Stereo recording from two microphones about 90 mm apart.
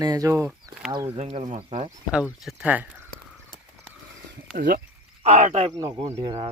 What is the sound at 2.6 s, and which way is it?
Speech, 15° right (ahead or behind).